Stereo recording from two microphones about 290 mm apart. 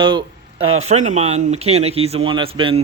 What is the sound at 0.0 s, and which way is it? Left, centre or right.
Speech, centre.